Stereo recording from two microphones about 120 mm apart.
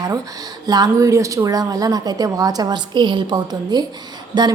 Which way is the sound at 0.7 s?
35° right (ahead or behind).